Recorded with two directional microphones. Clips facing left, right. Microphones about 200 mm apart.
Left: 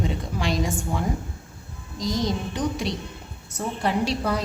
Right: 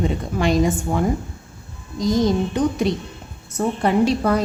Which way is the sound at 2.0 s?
50° right (ahead or behind).